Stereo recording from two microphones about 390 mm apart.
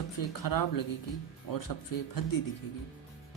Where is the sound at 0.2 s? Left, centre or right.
Left.